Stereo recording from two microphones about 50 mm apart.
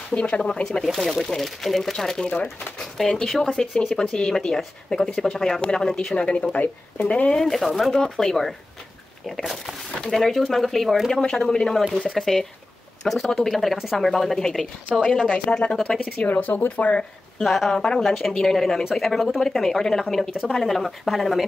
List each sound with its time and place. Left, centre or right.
0.1 s speech: left
0.8 s speech: centre
3.4 s speech: centre
6.1 s speech: left
7.3 s speech: centre
10.1 s speech: centre
11.1 s speech: centre
15.0 s speech: centre
15.7 s speech: centre
16.2 s speech: left
17.4 s speech: centre